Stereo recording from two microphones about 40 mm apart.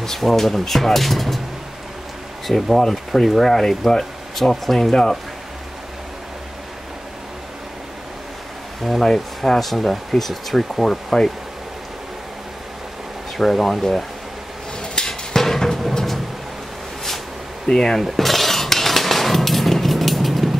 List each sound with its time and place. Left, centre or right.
0.0 s speech: centre
2.4 s speech: centre
9.0 s speech: centre
13.4 s speech: centre
14.8 s a sound: centre
17.6 s speech: centre
18.0 s cutlery: centre